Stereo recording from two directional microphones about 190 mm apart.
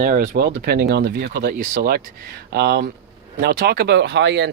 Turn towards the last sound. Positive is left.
turn(degrees=-70)  # may be behind; listen again after turning